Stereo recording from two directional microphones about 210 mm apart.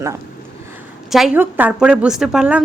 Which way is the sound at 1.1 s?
Centre (ahead or behind).